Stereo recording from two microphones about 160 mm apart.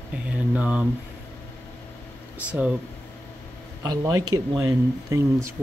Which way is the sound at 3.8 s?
20° right (ahead or behind).